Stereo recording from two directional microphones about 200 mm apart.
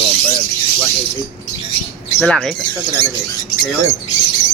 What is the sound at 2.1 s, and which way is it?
Speech, 5° left (ahead or behind).